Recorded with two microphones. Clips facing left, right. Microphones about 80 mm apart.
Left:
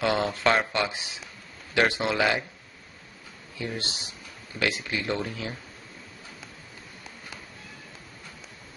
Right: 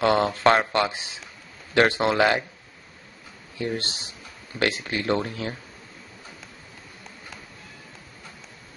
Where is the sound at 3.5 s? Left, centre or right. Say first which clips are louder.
Right 5 dB; right.